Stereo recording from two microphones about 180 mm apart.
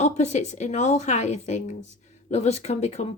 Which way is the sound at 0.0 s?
40° left (ahead or behind).